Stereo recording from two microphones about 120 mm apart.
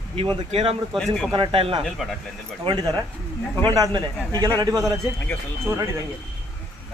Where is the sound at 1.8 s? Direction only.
Centre (ahead or behind).